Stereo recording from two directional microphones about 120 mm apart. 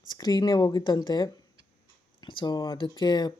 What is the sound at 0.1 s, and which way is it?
Speech, 35° left (ahead or behind).